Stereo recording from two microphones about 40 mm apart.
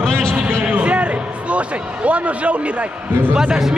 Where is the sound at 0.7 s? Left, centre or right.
Right.